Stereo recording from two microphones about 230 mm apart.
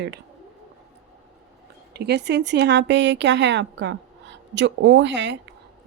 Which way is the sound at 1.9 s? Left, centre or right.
Right.